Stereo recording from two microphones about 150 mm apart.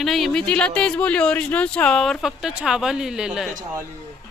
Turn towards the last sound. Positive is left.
turn(degrees=0)  # may be behind; listen again after turning